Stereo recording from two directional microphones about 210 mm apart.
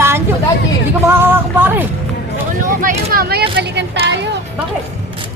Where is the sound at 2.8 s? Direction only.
45° right (ahead or behind).